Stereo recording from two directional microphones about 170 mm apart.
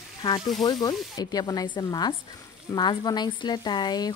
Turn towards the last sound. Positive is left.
turn(degrees=25)  # may be behind; listen again after turning